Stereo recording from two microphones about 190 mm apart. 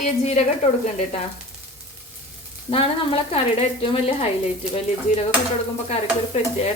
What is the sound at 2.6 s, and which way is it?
Speech, 30° left (ahead or behind).